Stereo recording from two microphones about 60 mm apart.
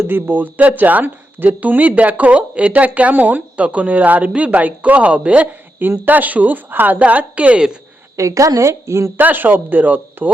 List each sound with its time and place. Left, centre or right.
0.0 s speech: right
5.8 s a woman's voice: right
8.1 s a woman's voice: right
9.1 s a woman's voice: right